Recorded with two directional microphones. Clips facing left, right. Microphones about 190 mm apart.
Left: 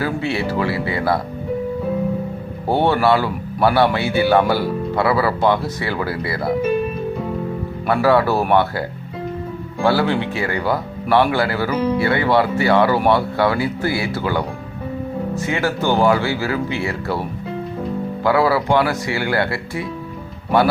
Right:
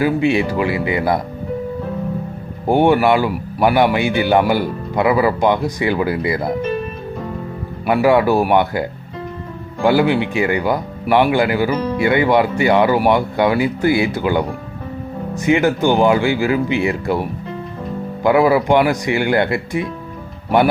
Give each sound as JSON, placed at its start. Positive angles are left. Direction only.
{"t": 0.0, "sound": "speech", "side_deg": -15}
{"t": 2.6, "sound": "speech", "side_deg": -15}
{"t": 7.9, "sound": "speech", "side_deg": -15}
{"t": 9.8, "sound": "speech", "side_deg": -15}